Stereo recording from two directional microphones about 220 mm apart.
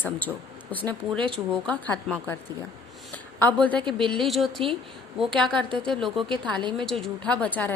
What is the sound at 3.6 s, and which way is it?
A woman's voice, 5° left (ahead or behind).